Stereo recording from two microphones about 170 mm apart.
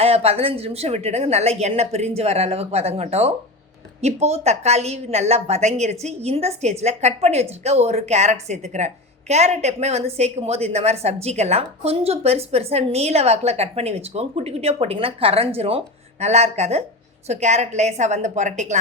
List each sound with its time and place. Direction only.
0.0 s a woman's voice: 35° right (ahead or behind)